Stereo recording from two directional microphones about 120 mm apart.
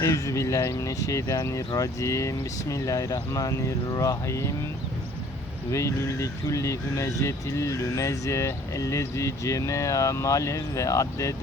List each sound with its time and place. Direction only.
0.0 s speech: 25° left (ahead or behind)
5.7 s speech: 25° left (ahead or behind)